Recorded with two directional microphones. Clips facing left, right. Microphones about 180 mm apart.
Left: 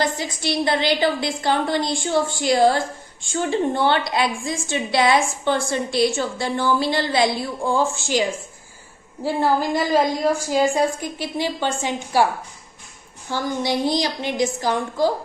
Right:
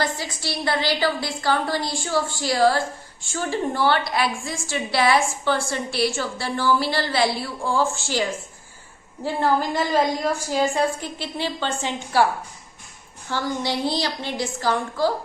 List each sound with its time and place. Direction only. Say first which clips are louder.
0.0 s a woman's voice: left 3 dB; 20° left (ahead or behind)
13.3 s a woman's voice: left 2 dB; 15° left (ahead or behind)